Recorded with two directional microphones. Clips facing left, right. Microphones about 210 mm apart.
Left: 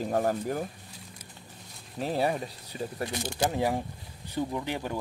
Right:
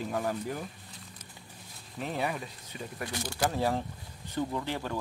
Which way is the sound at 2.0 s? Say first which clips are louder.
Left 5 dB; 35° left (ahead or behind).